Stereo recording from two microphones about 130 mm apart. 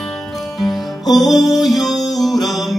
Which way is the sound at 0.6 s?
Centre (ahead or behind).